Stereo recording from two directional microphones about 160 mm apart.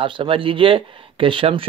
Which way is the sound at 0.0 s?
30° right (ahead or behind).